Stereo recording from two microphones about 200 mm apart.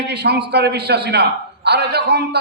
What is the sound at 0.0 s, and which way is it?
Speech, 55° right (ahead or behind).